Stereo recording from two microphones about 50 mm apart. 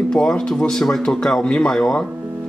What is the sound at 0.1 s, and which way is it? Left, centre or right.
Speech, centre.